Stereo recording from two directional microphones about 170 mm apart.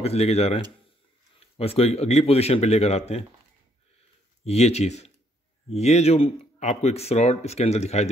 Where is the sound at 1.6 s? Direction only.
35° left (ahead or behind).